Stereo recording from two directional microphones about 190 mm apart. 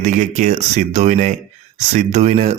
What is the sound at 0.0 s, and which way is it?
Speech, 40° right (ahead or behind).